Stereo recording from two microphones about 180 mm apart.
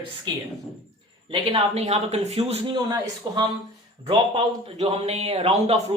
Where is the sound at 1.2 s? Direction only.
30° right (ahead or behind).